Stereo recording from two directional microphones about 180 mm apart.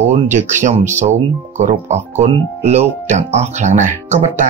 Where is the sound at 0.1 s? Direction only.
40° right (ahead or behind).